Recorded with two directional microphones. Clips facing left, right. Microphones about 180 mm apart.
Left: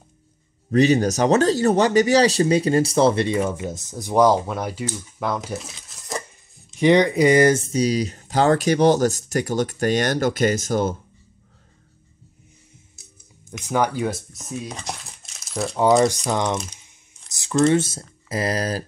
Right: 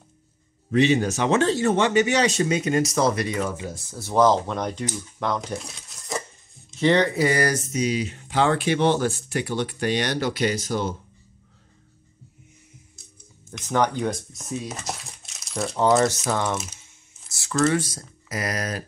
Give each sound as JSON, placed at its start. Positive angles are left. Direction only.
{"t": 0.7, "sound": "speech", "side_deg": 40}
{"t": 6.7, "sound": "speech", "side_deg": 15}
{"t": 13.5, "sound": "speech", "side_deg": 10}
{"t": 16.3, "sound": "speech", "side_deg": 15}